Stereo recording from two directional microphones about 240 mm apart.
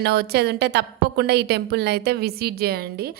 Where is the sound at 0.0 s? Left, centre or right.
Right.